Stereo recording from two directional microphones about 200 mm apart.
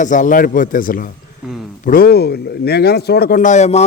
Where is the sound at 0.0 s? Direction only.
40° left (ahead or behind).